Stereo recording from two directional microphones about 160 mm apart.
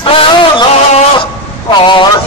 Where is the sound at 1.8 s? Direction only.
30° left (ahead or behind).